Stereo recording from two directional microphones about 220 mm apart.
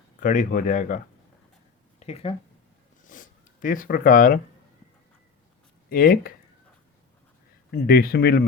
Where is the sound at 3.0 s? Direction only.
35° left (ahead or behind).